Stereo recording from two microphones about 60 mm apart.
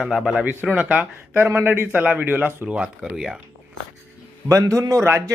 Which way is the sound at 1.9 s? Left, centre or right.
Right.